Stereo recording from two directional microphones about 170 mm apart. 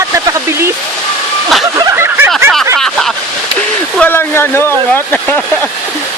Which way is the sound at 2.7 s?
Centre (ahead or behind).